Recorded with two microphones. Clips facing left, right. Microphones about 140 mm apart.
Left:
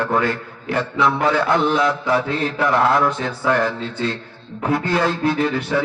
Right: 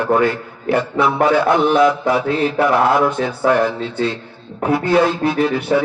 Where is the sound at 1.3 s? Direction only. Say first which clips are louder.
Right 4 dB; 5° right (ahead or behind).